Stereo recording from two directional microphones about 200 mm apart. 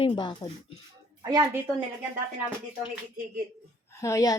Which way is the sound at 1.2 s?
20° right (ahead or behind).